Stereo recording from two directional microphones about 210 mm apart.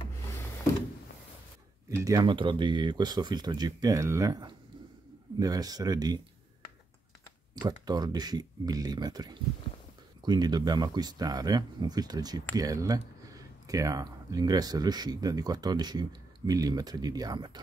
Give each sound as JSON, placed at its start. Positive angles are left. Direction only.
{"t": 1.9, "sound": "speech", "side_deg": -15}
{"t": 7.6, "sound": "speech", "side_deg": -20}